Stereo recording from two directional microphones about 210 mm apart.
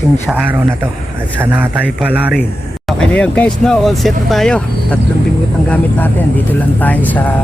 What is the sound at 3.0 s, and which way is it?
Speech, 5° left (ahead or behind).